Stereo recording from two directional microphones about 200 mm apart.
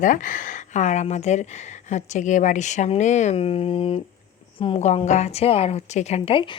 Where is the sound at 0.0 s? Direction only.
40° left (ahead or behind).